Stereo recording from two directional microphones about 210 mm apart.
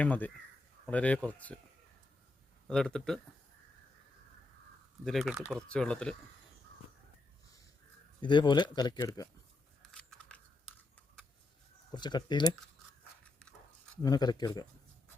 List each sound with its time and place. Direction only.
0.0 s speech: 10° left (ahead or behind)
2.6 s speech: 5° left (ahead or behind)
5.0 s speech: centre (ahead or behind)
8.2 s speech: 20° left (ahead or behind)
9.9 s scissors: 5° left (ahead or behind)
11.9 s speech: 20° left (ahead or behind)
14.0 s speech: 20° left (ahead or behind)